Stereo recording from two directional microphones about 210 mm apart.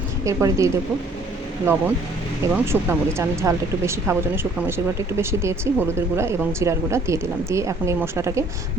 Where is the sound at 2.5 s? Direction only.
10° right (ahead or behind).